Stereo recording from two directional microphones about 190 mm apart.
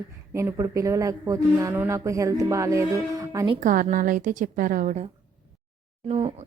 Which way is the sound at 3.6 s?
45° right (ahead or behind).